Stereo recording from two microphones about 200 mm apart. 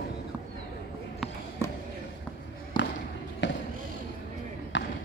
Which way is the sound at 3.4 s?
60° left (ahead or behind).